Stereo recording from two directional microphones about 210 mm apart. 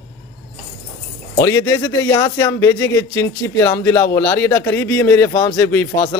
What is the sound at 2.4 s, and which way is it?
Speech, 10° left (ahead or behind).